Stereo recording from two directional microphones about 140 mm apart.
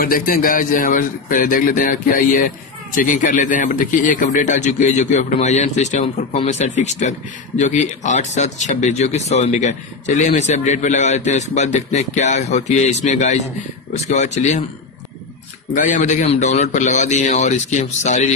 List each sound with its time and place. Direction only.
0.0 s speech: 85° left
3.0 s speech: 65° left (ahead or behind)
15.7 s speech: 65° left (ahead or behind)